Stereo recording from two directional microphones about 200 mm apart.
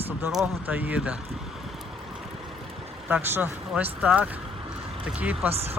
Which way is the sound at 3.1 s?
10° right (ahead or behind).